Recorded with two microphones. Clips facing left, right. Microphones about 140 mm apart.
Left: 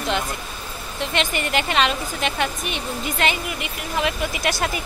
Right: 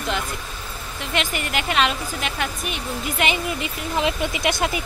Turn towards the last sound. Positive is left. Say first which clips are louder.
# right 1 dB
turn(degrees=-20)  # may be behind; listen again after turning